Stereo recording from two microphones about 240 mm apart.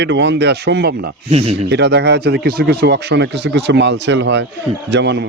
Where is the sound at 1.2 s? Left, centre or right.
Right.